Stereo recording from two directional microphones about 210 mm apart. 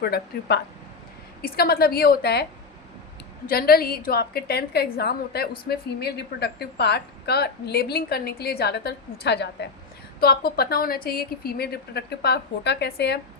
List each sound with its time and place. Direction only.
0.0 s a woman's voice: 50° left (ahead or behind)